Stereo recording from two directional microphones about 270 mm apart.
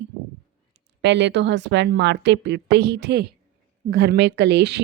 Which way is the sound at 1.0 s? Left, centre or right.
Right.